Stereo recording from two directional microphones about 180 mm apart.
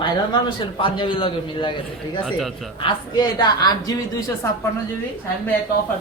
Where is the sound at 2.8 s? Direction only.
25° left (ahead or behind).